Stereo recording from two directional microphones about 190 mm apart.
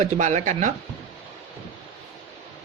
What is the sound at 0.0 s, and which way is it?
Speech, 40° right (ahead or behind).